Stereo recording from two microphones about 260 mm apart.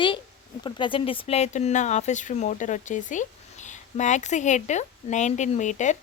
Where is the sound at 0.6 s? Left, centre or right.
Centre.